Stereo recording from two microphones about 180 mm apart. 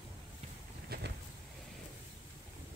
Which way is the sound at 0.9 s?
60° right (ahead or behind).